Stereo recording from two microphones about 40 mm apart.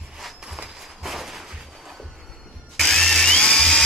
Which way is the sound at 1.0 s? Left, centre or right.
Centre.